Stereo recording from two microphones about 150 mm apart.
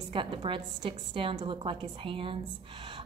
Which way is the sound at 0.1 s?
35° right (ahead or behind).